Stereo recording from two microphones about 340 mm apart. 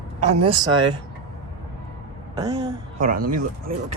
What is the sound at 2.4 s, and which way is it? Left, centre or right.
Speech, centre.